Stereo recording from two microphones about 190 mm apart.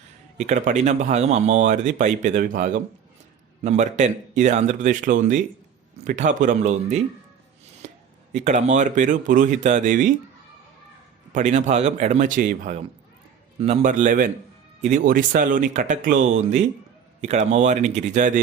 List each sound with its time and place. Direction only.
0.3 s speech: 40° right (ahead or behind)
7.8 s a sound: 40° right (ahead or behind)
8.3 s speech: 35° right (ahead or behind)
11.3 s speech: 40° right (ahead or behind)